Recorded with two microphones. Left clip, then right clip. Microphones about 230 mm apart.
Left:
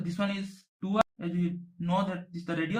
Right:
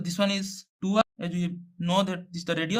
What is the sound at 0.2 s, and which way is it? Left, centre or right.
Speech, right.